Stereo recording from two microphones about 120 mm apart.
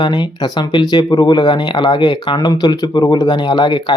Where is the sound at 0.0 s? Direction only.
40° left (ahead or behind).